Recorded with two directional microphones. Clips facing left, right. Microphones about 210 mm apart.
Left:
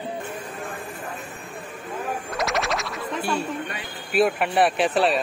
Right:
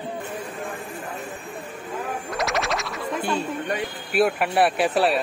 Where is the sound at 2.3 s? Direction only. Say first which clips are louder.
Right 1 dB; centre (ahead or behind).